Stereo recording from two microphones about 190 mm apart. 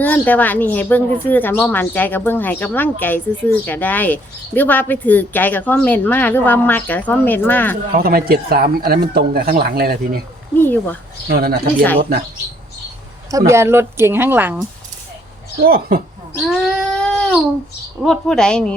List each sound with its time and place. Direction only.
0.0 s speech: 10° left (ahead or behind)
7.9 s speech: 50° right (ahead or behind)
10.6 s speech: 10° left (ahead or behind)
11.3 s speech: 55° right (ahead or behind)
13.3 s speech: 15° right (ahead or behind)
15.6 s speech: 50° right (ahead or behind)
16.5 s a sound: centre (ahead or behind)
18.0 s a woman's voice: 5° left (ahead or behind)